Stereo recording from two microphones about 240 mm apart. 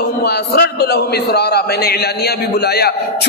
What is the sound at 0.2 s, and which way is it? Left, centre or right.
A man's voice, left.